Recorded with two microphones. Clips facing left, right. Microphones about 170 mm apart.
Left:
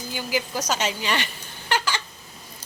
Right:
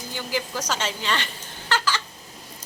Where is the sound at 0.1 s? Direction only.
10° left (ahead or behind).